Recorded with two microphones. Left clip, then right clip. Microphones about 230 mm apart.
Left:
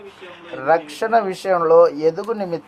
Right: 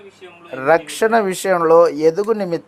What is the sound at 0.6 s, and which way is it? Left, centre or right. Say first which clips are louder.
Speech: right 3 dB; right.